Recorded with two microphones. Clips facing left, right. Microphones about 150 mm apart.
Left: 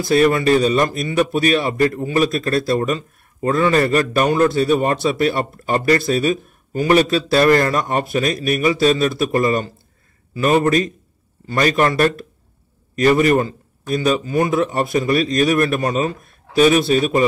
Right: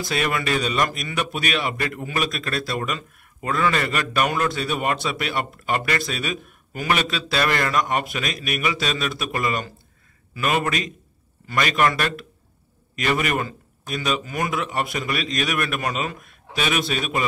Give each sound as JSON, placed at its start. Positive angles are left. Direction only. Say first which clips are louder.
{"t": 0.0, "sound": "a man's voice", "louder": "left 10 dB", "side_deg": 35}